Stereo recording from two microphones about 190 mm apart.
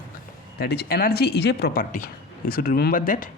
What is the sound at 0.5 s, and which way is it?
A woman's voice, 55° left (ahead or behind).